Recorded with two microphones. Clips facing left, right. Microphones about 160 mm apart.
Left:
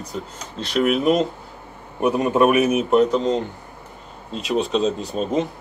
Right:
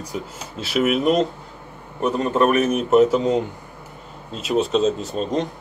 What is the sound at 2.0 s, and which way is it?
A man's voice, 10° left (ahead or behind).